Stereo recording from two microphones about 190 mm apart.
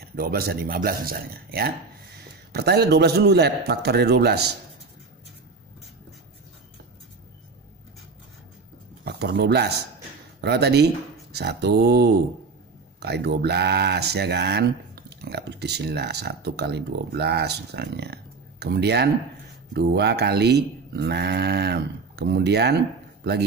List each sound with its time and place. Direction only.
0.1 s speech: 50° right (ahead or behind)
9.0 s speech: 60° right (ahead or behind)